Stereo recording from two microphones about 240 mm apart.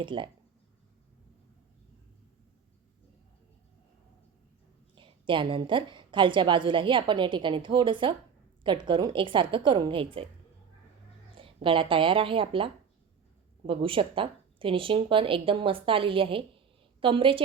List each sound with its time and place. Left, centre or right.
0.0 s a woman's voice: right
4.9 s a woman's voice: right
11.3 s a woman's voice: right